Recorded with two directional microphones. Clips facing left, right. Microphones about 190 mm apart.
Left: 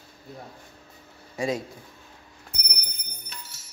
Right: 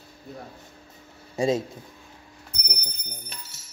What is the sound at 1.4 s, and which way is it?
Speech, 25° right (ahead or behind).